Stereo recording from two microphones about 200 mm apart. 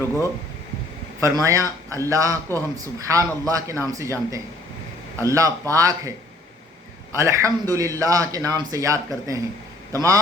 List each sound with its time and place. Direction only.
1.2 s speech: 15° right (ahead or behind)
7.2 s speech: 15° right (ahead or behind)